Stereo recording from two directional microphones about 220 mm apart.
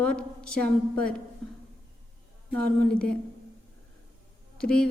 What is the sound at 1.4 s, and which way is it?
Music, centre (ahead or behind).